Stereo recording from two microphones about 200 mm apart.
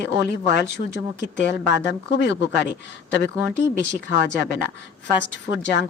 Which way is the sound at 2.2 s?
60° left (ahead or behind).